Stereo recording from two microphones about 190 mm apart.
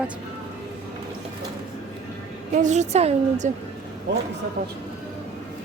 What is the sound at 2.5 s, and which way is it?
A woman's voice, 40° right (ahead or behind).